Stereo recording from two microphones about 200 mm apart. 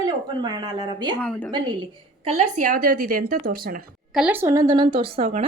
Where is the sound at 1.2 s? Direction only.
5° left (ahead or behind).